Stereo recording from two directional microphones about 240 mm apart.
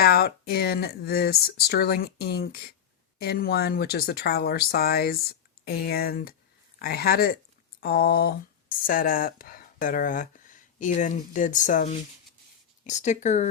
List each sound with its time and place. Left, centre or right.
0.0 s speech: left